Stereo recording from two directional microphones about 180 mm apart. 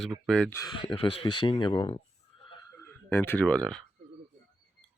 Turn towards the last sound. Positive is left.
turn(degrees=5)  # may be behind; listen again after turning